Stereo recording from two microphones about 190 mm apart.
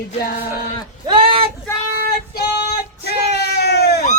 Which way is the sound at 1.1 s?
30° right (ahead or behind).